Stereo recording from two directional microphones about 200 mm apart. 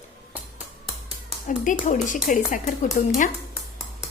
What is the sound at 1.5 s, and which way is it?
A woman's voice, 40° left (ahead or behind).